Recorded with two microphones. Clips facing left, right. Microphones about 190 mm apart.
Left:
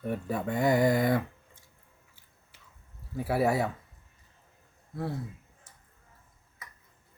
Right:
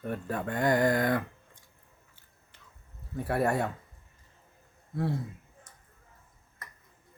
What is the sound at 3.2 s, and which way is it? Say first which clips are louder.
Speech: left 1 dB; 5° left (ahead or behind).